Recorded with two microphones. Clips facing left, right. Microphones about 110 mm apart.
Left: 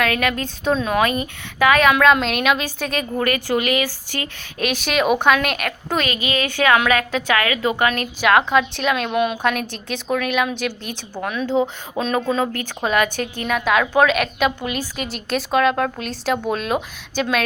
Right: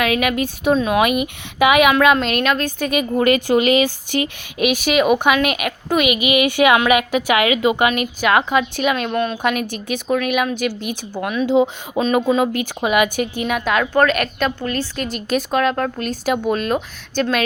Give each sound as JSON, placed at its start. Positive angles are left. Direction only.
{"t": 0.0, "sound": "a woman's voice", "side_deg": -10}
{"t": 2.9, "sound": "speech", "side_deg": -15}
{"t": 4.5, "sound": "a woman's voice", "side_deg": -5}
{"t": 8.0, "sound": "a woman's voice", "side_deg": 0}
{"t": 9.1, "sound": "a woman's voice", "side_deg": 10}
{"t": 9.4, "sound": "a woman's voice", "side_deg": -5}